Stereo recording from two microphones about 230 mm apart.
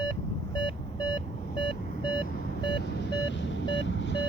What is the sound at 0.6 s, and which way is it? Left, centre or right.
Beep, centre.